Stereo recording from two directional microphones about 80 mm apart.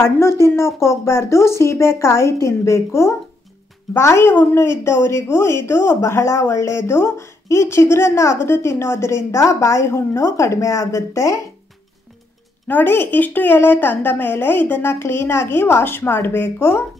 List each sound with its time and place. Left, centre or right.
0.0 s a woman's voice: left
12.6 s a woman's voice: left